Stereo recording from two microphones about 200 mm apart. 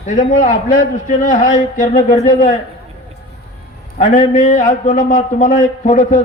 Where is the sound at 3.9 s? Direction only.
40° left (ahead or behind).